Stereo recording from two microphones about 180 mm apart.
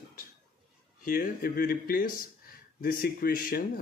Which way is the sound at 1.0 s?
50° left (ahead or behind).